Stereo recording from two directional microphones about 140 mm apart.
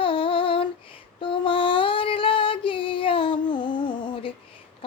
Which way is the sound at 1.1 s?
35° left (ahead or behind).